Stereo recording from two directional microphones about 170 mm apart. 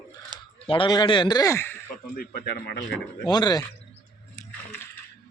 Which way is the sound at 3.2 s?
25° left (ahead or behind).